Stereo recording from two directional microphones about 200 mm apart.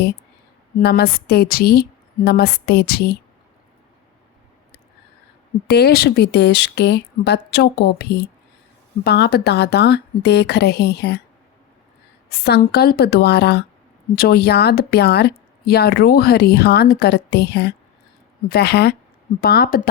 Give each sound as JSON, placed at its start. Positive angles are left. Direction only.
{"t": 0.8, "sound": "a woman's voice", "side_deg": 50}
{"t": 5.6, "sound": "speech", "side_deg": 55}
{"t": 12.5, "sound": "a woman's voice", "side_deg": 55}